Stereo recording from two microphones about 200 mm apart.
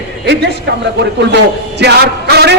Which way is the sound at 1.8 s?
55° right (ahead or behind).